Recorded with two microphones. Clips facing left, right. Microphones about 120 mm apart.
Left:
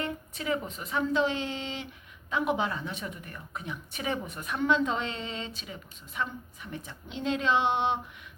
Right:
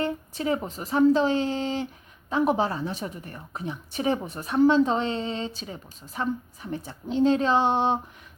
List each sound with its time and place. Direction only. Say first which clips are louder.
0.0 s a woman's voice: right 6 dB; 35° right (ahead or behind)